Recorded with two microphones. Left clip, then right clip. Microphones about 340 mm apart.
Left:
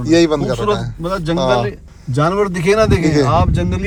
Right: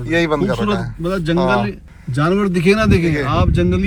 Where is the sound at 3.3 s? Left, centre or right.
Left.